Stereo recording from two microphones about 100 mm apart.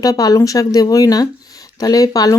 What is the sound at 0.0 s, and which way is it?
Speech, 40° left (ahead or behind).